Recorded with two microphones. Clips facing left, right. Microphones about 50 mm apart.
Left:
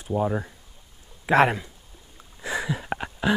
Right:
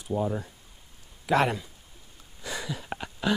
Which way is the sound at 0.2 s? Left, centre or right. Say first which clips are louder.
Left 4 dB; left.